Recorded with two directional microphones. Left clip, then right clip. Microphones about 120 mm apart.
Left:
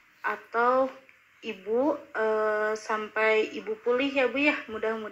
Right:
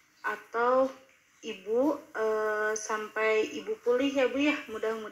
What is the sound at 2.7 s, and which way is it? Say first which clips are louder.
Speech: left 3 dB; 10° left (ahead or behind).